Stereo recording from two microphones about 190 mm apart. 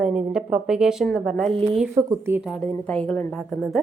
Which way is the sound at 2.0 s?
15° right (ahead or behind).